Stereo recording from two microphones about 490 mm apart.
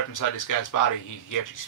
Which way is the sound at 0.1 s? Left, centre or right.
Left.